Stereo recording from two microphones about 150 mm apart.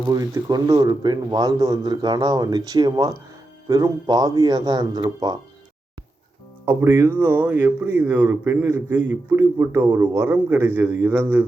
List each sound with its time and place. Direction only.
0.0 s a man's voice: 25° right (ahead or behind)
6.7 s a man's voice: 15° right (ahead or behind)